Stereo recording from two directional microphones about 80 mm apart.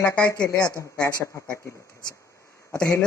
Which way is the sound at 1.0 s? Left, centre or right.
Left.